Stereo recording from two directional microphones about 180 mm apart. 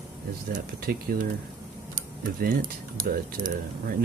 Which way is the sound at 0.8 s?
55° right (ahead or behind).